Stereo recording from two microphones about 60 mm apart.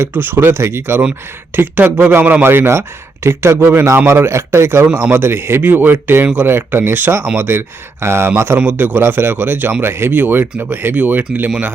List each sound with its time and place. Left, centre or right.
0.0 s speech: right
4.3 s speech: right
8.5 s speech: right